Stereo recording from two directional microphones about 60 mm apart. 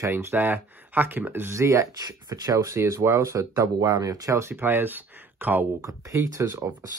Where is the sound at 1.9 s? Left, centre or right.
Right.